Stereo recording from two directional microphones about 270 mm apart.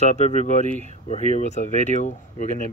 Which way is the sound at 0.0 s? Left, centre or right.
Left.